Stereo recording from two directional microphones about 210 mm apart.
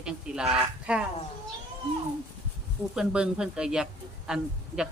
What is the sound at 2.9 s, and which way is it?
Speech, 5° right (ahead or behind).